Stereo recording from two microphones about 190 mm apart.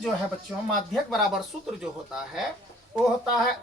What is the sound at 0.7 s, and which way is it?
Speech, centre (ahead or behind).